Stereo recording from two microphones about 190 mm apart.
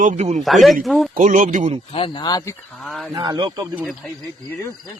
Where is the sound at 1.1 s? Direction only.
45° right (ahead or behind).